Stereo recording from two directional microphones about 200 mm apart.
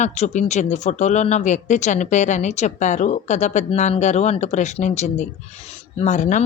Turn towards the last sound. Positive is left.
turn(degrees=35)  # may be behind; listen again after turning